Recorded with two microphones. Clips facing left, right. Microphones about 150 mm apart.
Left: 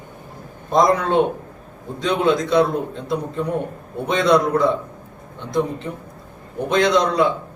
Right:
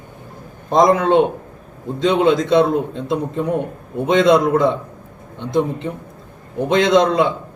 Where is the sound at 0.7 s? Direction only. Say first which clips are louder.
Right 3 dB; 20° right (ahead or behind).